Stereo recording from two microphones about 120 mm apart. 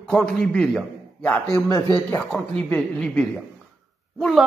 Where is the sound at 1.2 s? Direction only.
15° left (ahead or behind).